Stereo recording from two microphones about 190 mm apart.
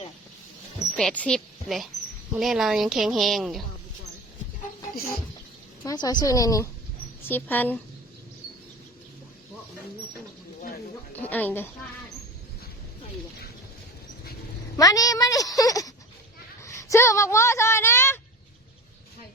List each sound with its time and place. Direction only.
0.9 s a woman's voice: 5° left (ahead or behind)
5.8 s a woman's voice: 20° left (ahead or behind)
11.2 s a woman's voice: 10° left (ahead or behind)
14.8 s a woman's voice: 20° left (ahead or behind)